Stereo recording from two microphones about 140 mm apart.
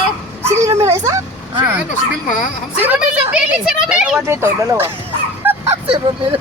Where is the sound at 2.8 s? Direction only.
15° right (ahead or behind).